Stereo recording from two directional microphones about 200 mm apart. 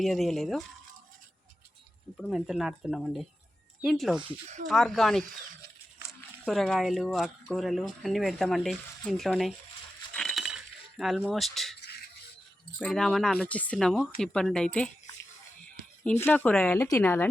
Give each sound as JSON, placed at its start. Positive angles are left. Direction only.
{"t": 0.0, "sound": "speech", "side_deg": 0}
{"t": 2.1, "sound": "speech", "side_deg": 0}
{"t": 4.2, "sound": "speech", "side_deg": -30}
{"t": 4.6, "sound": "speech", "side_deg": 0}
{"t": 6.4, "sound": "speech", "side_deg": 0}
{"t": 10.2, "sound": "coin", "side_deg": 0}
{"t": 11.8, "sound": "a sound", "side_deg": 50}
{"t": 12.8, "sound": "speech", "side_deg": 0}
{"t": 16.2, "sound": "speech", "side_deg": 10}